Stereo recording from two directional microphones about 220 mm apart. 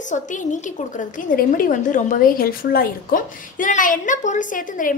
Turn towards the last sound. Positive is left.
turn(degrees=35)  # may be behind; listen again after turning